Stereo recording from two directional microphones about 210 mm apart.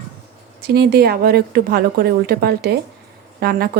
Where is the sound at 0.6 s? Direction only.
50° right (ahead or behind).